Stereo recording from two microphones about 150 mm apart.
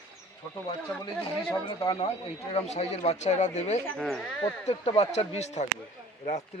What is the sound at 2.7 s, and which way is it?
Speech, 45° left (ahead or behind).